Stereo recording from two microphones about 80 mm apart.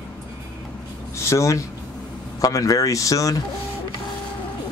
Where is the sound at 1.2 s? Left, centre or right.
Left.